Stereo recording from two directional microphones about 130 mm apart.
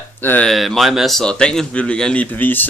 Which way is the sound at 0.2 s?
15° left (ahead or behind).